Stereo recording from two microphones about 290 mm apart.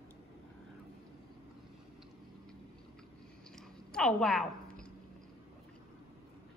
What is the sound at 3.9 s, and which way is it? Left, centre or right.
Speech, centre.